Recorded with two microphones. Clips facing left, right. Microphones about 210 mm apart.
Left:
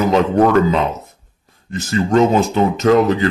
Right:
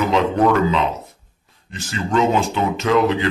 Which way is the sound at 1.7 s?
40° left (ahead or behind).